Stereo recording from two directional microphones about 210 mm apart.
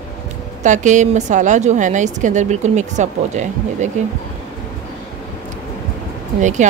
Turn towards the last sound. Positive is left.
turn(degrees=-35)  # may be behind; listen again after turning